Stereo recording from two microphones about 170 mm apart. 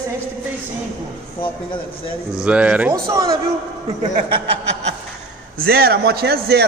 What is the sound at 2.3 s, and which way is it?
Speech, 5° right (ahead or behind).